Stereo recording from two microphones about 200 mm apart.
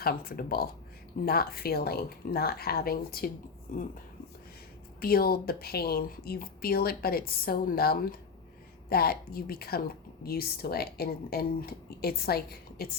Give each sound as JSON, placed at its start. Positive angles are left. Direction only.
{"t": 0.0, "sound": "a woman's voice", "side_deg": 50}
{"t": 4.9, "sound": "a woman's voice", "side_deg": 50}